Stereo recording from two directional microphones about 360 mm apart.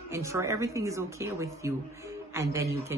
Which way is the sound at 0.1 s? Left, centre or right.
Centre.